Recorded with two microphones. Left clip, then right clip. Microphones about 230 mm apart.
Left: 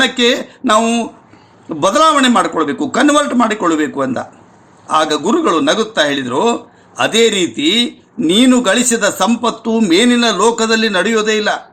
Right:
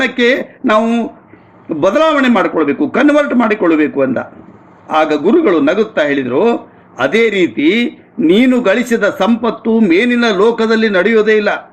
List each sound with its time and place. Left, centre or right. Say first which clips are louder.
0.0 s speech: right 1 dB; left